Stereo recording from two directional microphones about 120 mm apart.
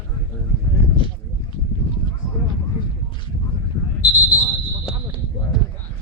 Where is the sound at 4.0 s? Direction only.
30° left (ahead or behind).